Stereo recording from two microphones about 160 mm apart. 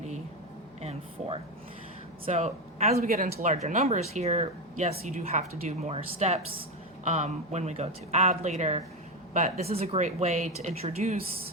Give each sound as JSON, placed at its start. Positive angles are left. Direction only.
{"t": 0.8, "sound": "a sound", "side_deg": -40}
{"t": 2.3, "sound": "speech", "side_deg": -45}
{"t": 3.0, "sound": "speech", "side_deg": -65}
{"t": 3.4, "sound": "speech", "side_deg": -50}